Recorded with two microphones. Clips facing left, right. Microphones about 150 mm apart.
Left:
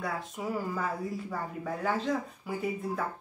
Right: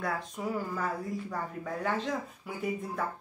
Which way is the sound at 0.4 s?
10° left (ahead or behind).